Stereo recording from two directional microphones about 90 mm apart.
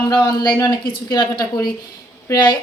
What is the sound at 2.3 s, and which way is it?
Speech, 35° left (ahead or behind).